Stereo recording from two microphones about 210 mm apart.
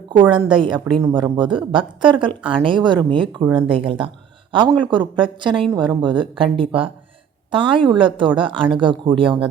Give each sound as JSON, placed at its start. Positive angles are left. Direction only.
{"t": 0.1, "sound": "a woman's voice", "side_deg": -25}